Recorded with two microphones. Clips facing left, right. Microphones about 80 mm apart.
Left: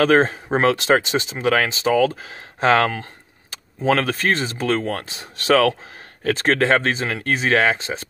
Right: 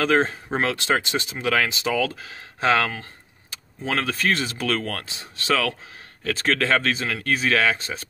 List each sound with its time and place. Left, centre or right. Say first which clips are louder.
0.0 s speech: left 5 dB; left